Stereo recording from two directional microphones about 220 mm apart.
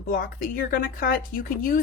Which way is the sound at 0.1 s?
40° left (ahead or behind).